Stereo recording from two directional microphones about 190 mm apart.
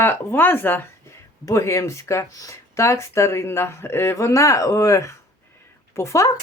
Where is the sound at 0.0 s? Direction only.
10° left (ahead or behind).